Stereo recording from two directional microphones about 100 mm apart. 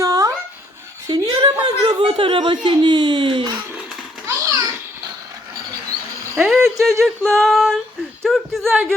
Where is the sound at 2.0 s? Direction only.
60° right (ahead or behind).